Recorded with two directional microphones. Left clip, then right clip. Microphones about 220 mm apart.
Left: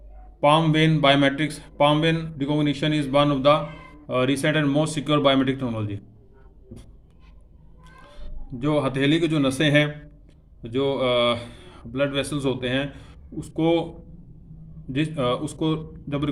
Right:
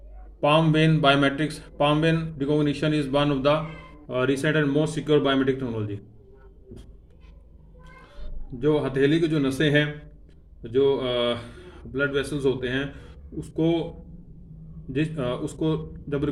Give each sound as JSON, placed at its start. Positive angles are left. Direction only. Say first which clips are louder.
{"t": 0.3, "sound": "speech", "louder": "left 2 dB", "side_deg": 25}
{"t": 8.5, "sound": "speech", "louder": "right 1 dB", "side_deg": 40}
{"t": 14.9, "sound": "speech", "louder": "left 3 dB", "side_deg": 40}